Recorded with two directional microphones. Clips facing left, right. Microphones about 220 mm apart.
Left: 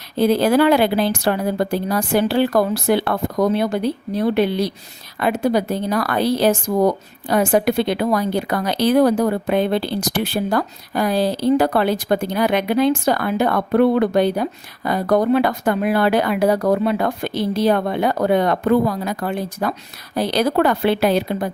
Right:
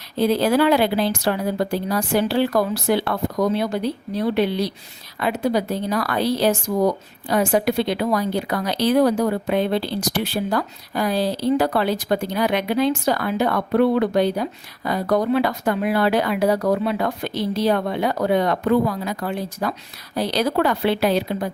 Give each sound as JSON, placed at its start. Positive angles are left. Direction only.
{"t": 0.2, "sound": "a woman's voice", "side_deg": 55}